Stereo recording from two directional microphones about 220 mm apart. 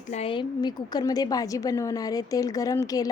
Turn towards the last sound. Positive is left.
turn(degrees=15)  # may be behind; listen again after turning